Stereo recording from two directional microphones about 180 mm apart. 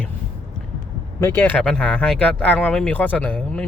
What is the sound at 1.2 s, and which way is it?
Speech, 15° left (ahead or behind).